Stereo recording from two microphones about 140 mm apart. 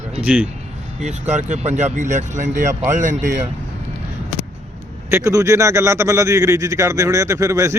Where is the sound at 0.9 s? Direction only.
55° right (ahead or behind).